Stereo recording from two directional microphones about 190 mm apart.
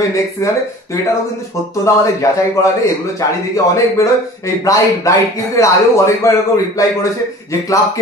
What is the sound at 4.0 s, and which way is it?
A man's voice, 15° left (ahead or behind).